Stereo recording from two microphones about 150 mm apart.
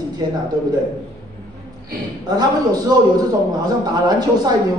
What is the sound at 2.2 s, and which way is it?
A man's voice, 25° right (ahead or behind).